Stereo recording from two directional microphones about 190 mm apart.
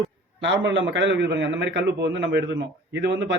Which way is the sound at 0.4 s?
75° right (ahead or behind).